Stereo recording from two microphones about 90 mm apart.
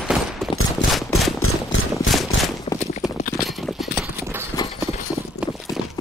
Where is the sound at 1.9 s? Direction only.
Centre (ahead or behind).